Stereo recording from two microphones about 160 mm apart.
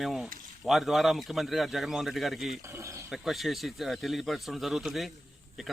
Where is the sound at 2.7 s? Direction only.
20° right (ahead or behind).